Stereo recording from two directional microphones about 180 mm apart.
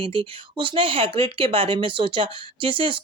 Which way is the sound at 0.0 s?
30° right (ahead or behind).